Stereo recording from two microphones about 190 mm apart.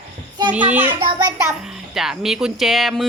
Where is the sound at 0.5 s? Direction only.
10° right (ahead or behind).